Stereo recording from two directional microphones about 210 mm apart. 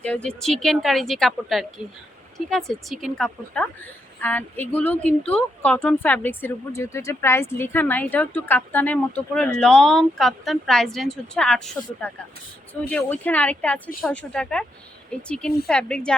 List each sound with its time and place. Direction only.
0.0 s speech: 5° left (ahead or behind)